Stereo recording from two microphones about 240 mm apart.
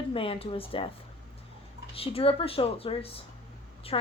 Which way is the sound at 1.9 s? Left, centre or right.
Left.